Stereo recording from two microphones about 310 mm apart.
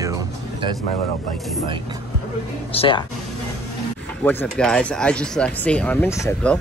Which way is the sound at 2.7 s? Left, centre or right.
Centre.